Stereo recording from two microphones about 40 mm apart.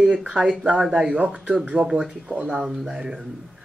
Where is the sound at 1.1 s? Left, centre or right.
Right.